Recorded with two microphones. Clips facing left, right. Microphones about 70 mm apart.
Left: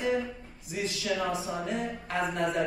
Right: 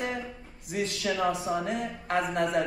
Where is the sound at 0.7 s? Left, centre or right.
Right.